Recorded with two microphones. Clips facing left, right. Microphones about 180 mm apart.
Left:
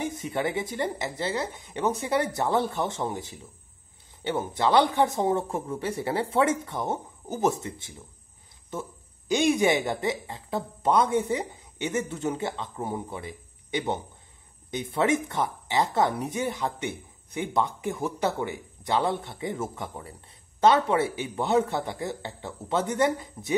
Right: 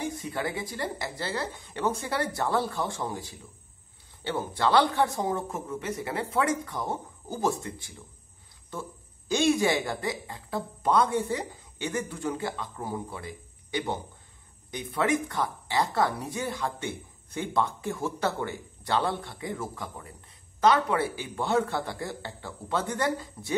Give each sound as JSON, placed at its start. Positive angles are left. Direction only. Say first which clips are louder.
{"t": 0.0, "sound": "speech", "louder": "left 3 dB", "side_deg": 20}
{"t": 9.3, "sound": "speech", "louder": "left 2 dB", "side_deg": 20}